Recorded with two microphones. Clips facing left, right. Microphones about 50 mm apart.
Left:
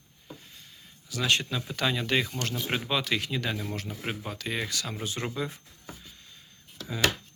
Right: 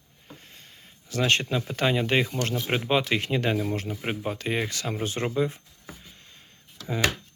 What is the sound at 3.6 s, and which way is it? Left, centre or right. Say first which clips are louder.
Speech: right 6 dB; right.